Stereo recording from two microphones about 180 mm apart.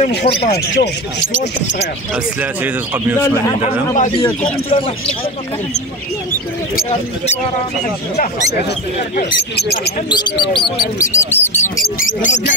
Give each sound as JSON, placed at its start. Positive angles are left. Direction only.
{"t": 0.5, "sound": "speech", "side_deg": 65}
{"t": 4.2, "sound": "speech", "side_deg": 10}
{"t": 9.6, "sound": "speech", "side_deg": 65}
{"t": 10.0, "sound": "speech", "side_deg": 25}
{"t": 11.8, "sound": "speech", "side_deg": 50}